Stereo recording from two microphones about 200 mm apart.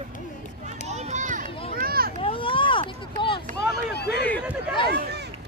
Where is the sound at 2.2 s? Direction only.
25° left (ahead or behind).